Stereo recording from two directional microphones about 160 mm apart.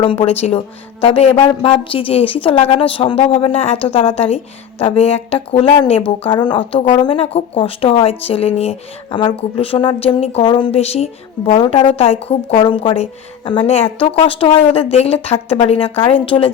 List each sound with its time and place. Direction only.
0.0 s speech: 35° left (ahead or behind)